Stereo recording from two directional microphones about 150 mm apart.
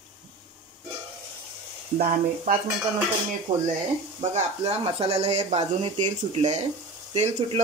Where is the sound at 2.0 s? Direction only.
85° right.